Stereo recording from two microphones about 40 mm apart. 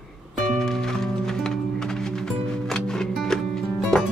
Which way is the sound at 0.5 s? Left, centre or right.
Centre.